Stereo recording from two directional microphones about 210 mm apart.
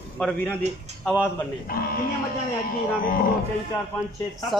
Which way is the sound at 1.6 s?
45° left (ahead or behind).